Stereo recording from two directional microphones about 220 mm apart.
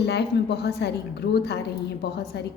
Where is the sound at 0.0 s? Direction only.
50° left (ahead or behind).